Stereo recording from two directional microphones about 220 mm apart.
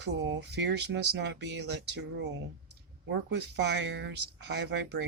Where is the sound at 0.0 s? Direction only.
55° right (ahead or behind).